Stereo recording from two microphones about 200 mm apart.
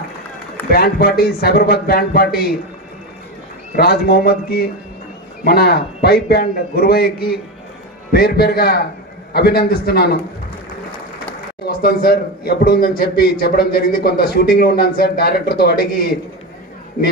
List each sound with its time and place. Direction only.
0.7 s speech: 50° left (ahead or behind)
3.7 s speech: 50° left (ahead or behind)
11.6 s speech: 50° left (ahead or behind)